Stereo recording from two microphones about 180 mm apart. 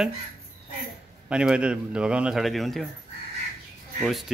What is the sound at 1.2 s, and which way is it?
Speech, 5° right (ahead or behind).